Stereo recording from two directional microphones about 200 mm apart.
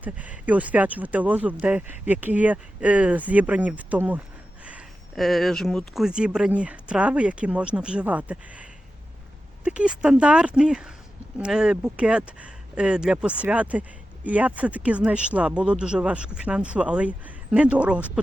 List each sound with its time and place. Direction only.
0.0 s speech: 5° right (ahead or behind)
9.6 s speech: 5° right (ahead or behind)